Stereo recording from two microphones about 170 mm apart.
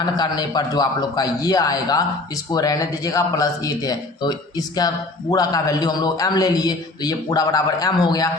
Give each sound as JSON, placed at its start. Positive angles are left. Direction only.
{"t": 0.0, "sound": "a man's voice", "side_deg": 25}